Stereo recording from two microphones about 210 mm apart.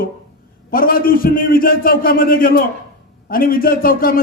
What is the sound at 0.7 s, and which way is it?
A man's voice, 45° left (ahead or behind).